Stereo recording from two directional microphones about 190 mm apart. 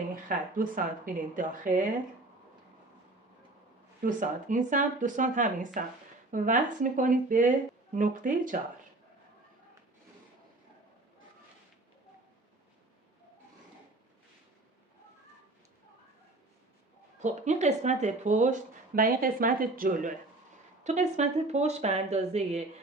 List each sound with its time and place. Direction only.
0.3 s speech: 45° right (ahead or behind)
4.0 s speech: 45° right (ahead or behind)
17.2 s speech: 40° right (ahead or behind)